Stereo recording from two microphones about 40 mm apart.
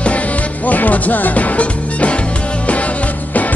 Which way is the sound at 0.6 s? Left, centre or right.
Left.